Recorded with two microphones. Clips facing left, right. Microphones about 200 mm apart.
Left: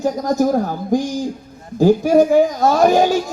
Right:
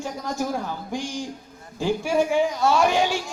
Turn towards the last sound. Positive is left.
turn(degrees=40)  # may be behind; listen again after turning